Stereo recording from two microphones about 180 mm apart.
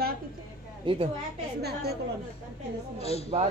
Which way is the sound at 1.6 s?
60° right (ahead or behind).